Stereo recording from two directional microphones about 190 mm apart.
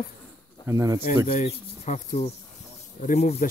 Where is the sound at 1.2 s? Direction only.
40° left (ahead or behind).